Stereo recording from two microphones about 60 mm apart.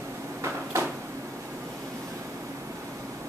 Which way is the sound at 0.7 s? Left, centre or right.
Right.